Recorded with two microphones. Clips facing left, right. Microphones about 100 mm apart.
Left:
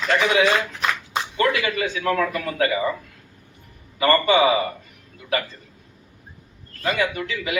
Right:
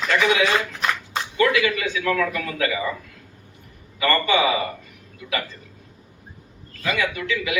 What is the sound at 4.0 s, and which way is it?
Speech, 35° left (ahead or behind).